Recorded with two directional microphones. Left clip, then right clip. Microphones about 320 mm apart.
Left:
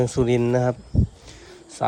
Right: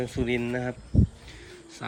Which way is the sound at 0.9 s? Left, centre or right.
Centre.